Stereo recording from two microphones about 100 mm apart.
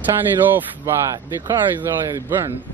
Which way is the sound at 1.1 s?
40° right (ahead or behind).